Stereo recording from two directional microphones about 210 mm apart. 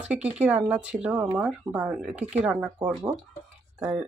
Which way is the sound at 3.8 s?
5° right (ahead or behind).